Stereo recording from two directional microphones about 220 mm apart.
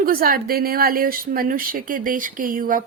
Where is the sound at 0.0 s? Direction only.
40° right (ahead or behind).